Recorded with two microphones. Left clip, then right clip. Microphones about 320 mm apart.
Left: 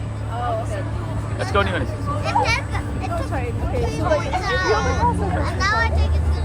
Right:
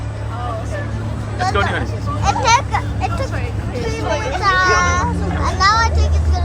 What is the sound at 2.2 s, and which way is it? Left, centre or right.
Children playing, centre.